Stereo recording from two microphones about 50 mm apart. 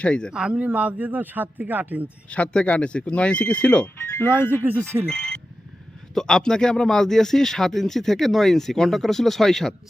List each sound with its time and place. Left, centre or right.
0.0 s speech: left
0.3 s speech: centre; by 2.0 s right
2.3 s speech: left
4.2 s speech: left
4.5 s speech: right
4.8 s speech: right
5.0 s speech: centre